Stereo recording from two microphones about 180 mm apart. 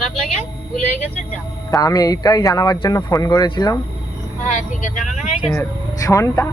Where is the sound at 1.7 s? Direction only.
20° left (ahead or behind).